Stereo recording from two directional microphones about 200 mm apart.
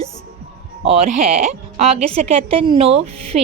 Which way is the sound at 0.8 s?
30° right (ahead or behind).